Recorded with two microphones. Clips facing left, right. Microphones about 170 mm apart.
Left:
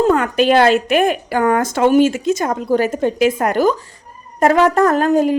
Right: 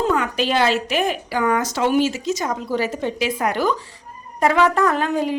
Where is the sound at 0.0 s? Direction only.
50° left (ahead or behind).